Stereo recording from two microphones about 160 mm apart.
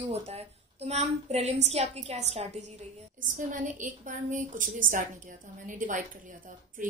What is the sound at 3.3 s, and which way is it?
A woman's voice, 55° right (ahead or behind).